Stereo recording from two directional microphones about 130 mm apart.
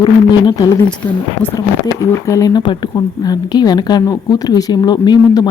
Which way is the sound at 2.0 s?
25° left (ahead or behind).